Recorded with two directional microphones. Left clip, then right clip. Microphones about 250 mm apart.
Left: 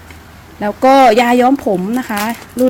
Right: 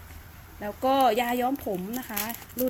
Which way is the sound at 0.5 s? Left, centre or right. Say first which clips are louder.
Left 15 dB; centre.